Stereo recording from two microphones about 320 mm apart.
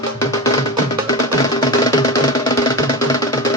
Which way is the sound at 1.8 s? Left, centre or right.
Centre.